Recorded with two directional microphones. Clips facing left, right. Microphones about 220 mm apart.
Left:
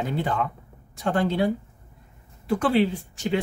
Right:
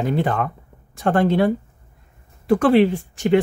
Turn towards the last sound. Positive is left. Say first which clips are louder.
# right 8 dB
turn(degrees=-60)  # may be behind; listen again after turning